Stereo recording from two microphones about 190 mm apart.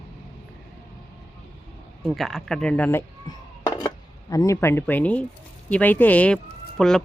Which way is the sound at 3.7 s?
20° left (ahead or behind).